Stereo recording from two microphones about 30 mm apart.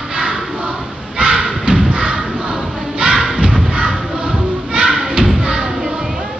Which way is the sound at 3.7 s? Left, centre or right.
Right.